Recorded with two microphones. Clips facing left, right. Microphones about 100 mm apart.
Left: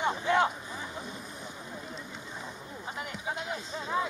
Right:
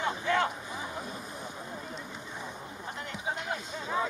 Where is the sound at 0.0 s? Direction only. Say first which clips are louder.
Left 2 dB; 20° left (ahead or behind).